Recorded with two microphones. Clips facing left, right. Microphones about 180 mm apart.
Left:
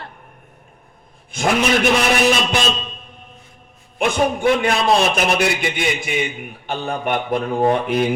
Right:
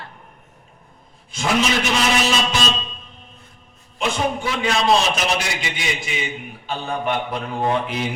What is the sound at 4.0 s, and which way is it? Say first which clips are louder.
A man's voice: left 4 dB; 55° left (ahead or behind).